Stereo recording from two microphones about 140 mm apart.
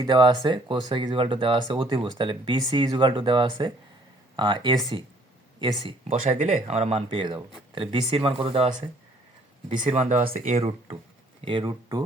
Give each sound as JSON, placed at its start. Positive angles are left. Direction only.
{"t": 0.1, "sound": "speech", "side_deg": -35}
{"t": 6.1, "sound": "speech", "side_deg": -65}
{"t": 9.6, "sound": "speech", "side_deg": -55}